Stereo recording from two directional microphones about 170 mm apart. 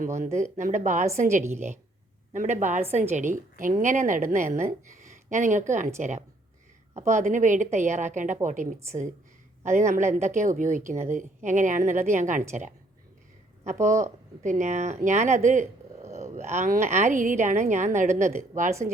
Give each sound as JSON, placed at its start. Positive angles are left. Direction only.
{"t": 0.0, "sound": "a woman's voice", "side_deg": -45}
{"t": 13.8, "sound": "a woman's voice", "side_deg": -45}